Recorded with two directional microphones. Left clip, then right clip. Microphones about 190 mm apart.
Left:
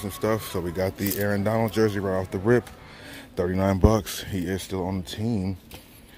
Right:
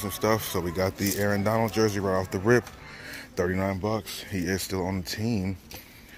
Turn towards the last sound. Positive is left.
turn(degrees=5)  # may be behind; listen again after turning